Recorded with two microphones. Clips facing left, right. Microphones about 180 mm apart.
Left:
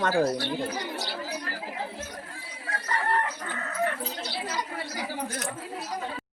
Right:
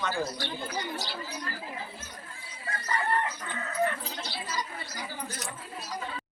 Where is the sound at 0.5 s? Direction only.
75° left (ahead or behind).